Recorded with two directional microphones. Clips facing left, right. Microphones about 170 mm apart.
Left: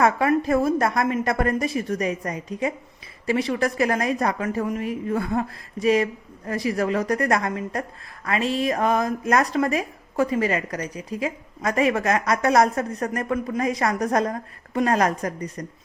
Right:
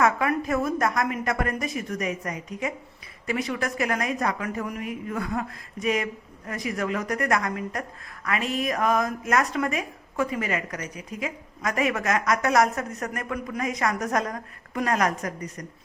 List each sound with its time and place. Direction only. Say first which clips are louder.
0.0 s a woman's voice: left 3 dB; 30° left (ahead or behind)